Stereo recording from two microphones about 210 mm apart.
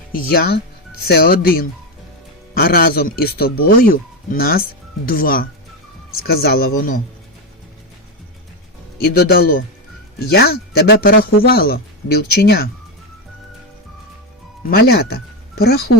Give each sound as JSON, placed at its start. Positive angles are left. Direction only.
{"t": 0.1, "sound": "speech", "side_deg": 45}
{"t": 9.0, "sound": "speech", "side_deg": 50}
{"t": 14.7, "sound": "speech", "side_deg": 45}